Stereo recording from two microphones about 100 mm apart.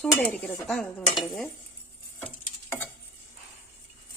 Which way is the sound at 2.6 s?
20° left (ahead or behind).